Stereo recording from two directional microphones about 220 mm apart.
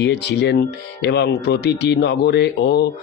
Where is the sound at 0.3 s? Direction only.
50° left (ahead or behind).